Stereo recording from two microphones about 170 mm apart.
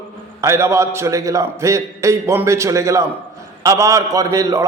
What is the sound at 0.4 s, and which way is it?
A man's voice, 15° right (ahead or behind).